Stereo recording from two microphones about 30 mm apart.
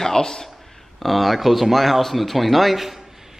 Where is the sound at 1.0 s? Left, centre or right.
Centre.